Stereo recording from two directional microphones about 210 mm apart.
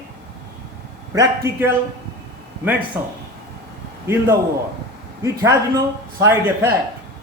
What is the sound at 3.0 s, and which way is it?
Speech, 10° right (ahead or behind).